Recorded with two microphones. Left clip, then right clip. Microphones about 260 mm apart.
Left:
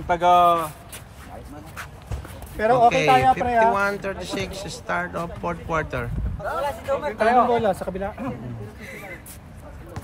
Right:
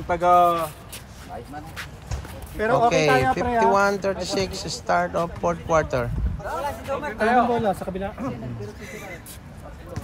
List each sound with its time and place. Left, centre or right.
0.1 s speech: left
2.6 s speech: left
3.7 s speech: centre
6.4 s speech: centre
7.0 s speech: left
7.5 s speech: centre
8.8 s speech: centre